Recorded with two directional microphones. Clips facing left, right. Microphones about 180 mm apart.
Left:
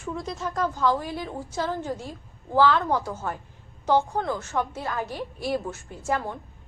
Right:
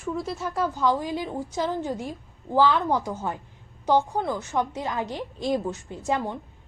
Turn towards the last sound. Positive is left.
turn(degrees=-15)  # may be behind; listen again after turning